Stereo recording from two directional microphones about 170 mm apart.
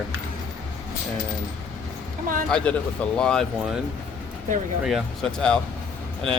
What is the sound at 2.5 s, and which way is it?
Speech, 5° left (ahead or behind).